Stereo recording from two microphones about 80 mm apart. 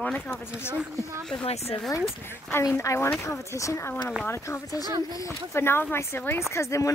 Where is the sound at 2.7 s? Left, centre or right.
Left.